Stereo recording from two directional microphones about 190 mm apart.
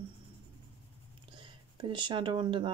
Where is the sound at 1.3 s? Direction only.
25° right (ahead or behind).